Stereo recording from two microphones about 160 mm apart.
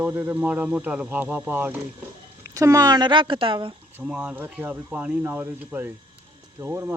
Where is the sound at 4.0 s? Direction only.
10° right (ahead or behind).